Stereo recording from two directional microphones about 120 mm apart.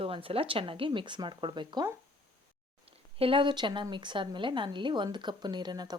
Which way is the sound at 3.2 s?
45° right (ahead or behind).